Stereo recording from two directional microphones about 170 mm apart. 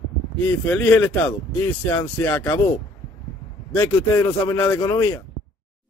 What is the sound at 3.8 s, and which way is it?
A man's voice, 15° left (ahead or behind).